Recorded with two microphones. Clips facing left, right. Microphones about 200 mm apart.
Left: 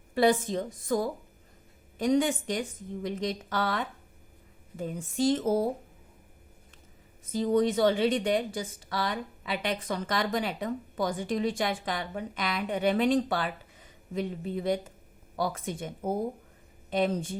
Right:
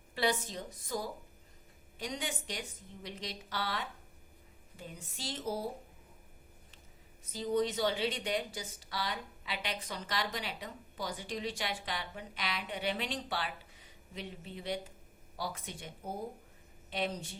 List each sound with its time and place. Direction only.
0.1 s a woman's voice: 50° left (ahead or behind)
7.3 s a woman's voice: 50° left (ahead or behind)
16.9 s a woman's voice: 50° left (ahead or behind)